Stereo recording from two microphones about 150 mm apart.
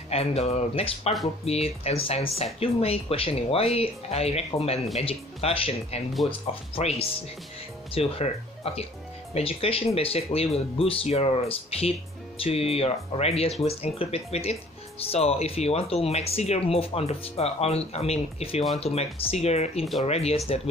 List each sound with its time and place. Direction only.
0.1 s speech: 45° left (ahead or behind)